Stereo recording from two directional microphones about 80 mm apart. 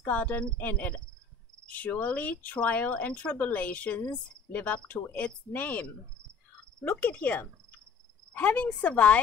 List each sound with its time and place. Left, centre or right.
0.0 s a woman's voice: centre